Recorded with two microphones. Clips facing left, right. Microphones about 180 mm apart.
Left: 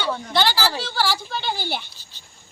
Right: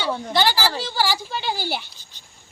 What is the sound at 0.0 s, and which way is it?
Speech, 10° right (ahead or behind).